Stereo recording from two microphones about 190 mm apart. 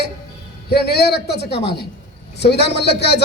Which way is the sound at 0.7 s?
60° left (ahead or behind).